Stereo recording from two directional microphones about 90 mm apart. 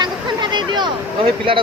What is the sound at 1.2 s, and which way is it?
Speech, 80° right.